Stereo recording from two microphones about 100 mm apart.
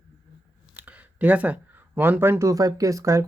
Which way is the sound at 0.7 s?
15° right (ahead or behind).